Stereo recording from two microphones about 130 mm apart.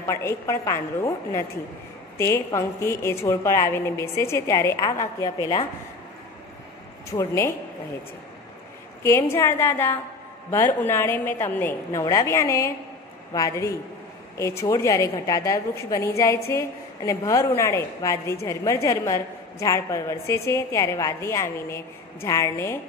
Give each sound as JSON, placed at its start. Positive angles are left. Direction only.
{"t": 0.0, "sound": "a woman's voice", "side_deg": 20}
{"t": 7.1, "sound": "a woman's voice", "side_deg": 20}
{"t": 9.0, "sound": "a woman's voice", "side_deg": 20}